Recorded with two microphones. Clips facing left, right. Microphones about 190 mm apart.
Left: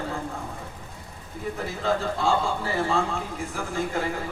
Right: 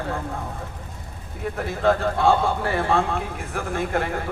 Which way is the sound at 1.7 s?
60° right (ahead or behind).